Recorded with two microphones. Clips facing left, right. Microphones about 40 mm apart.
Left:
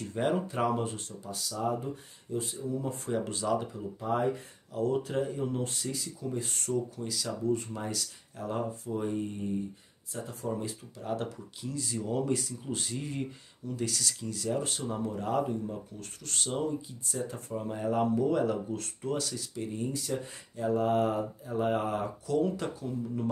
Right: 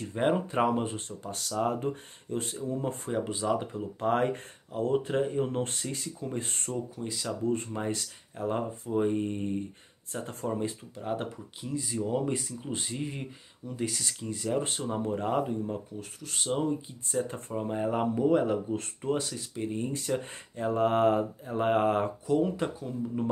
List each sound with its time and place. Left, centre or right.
0.1 s speech: right
1.2 s speech: right
3.1 s speech: centre
3.7 s speech: right
4.7 s speech: right
10.5 s speech: right
16.0 s speech: centre; by 22.1 s right
22.2 s speech: centre